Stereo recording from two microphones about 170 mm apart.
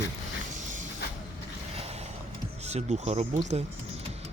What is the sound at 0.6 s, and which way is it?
Creak, 50° right (ahead or behind).